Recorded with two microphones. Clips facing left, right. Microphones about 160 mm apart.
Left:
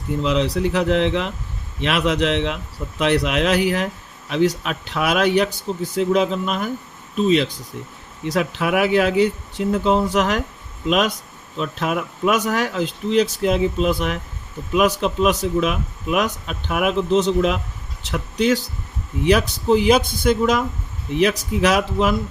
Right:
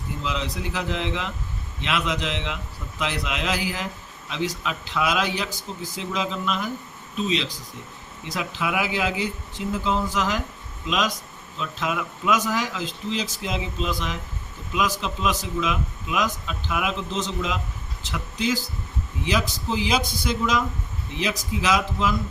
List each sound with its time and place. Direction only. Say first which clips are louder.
0.2 s a man's voice: left 10 dB; 65° left (ahead or behind)
21.2 s a man's voice: left 9 dB; 65° left (ahead or behind)